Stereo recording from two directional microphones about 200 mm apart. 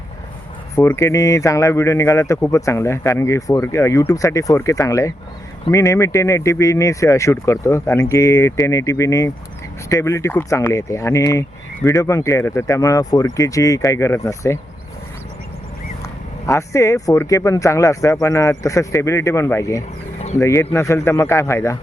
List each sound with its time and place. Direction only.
0.8 s speech: 10° left (ahead or behind)
16.5 s speech: 15° left (ahead or behind)